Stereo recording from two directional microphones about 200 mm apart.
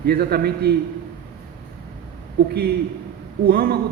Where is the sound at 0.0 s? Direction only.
50° right (ahead or behind).